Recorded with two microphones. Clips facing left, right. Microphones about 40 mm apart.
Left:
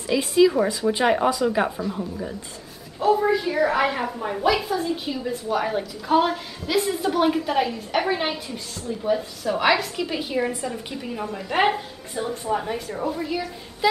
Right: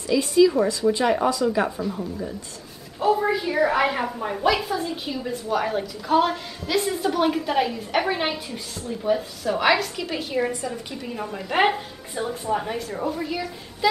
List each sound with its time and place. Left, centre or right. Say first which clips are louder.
0.0 s speech: even; centre
3.0 s a woman's voice: left 1 dB; centre